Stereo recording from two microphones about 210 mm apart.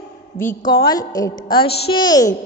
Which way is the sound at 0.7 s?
25° left (ahead or behind).